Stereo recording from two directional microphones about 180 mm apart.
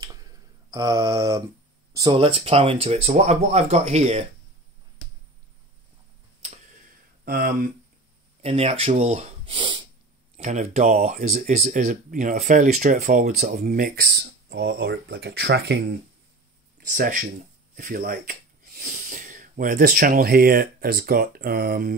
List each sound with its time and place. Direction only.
0.7 s mantra: 20° right (ahead or behind)
2.0 s speech: 25° right (ahead or behind)
7.2 s speech: 50° right (ahead or behind)
8.4 s speech: 35° right (ahead or behind)
9.6 s snort: 25° right (ahead or behind)
10.3 s speech: 35° right (ahead or behind); by 15.8 s 70° right (ahead or behind)
16.8 s speech: 50° right (ahead or behind)